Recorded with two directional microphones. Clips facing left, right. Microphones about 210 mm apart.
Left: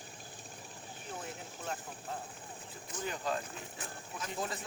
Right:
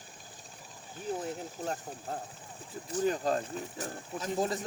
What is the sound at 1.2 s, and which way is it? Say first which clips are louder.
Speech: right 7 dB; 40° right (ahead or behind).